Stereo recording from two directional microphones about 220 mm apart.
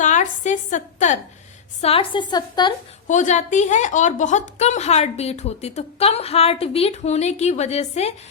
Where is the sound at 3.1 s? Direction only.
35° left (ahead or behind).